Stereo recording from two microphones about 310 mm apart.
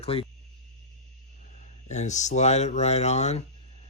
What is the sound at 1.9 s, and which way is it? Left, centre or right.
Speech, left.